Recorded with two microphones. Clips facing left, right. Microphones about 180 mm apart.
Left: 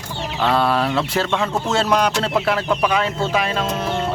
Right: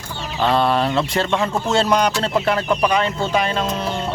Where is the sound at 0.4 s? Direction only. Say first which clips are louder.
Right 1 dB; centre (ahead or behind).